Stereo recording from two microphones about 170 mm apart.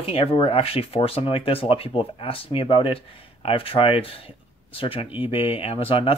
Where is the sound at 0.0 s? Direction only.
35° left (ahead or behind).